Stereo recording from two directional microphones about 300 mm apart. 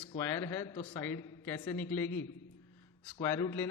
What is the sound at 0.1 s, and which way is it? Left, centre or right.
A man's voice, centre.